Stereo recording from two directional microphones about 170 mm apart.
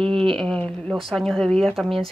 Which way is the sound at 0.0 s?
30° right (ahead or behind).